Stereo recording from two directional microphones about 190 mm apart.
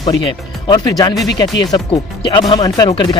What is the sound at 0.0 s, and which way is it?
Speech, 20° left (ahead or behind).